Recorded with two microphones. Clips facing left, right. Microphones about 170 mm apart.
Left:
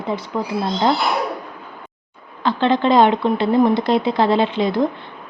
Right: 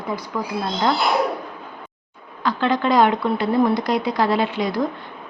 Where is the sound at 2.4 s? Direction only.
25° left (ahead or behind).